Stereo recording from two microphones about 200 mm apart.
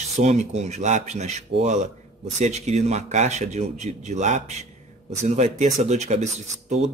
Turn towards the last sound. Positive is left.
turn(degrees=-35)  # may be behind; listen again after turning